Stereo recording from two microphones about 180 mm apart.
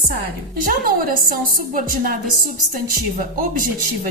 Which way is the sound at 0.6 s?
50° right (ahead or behind).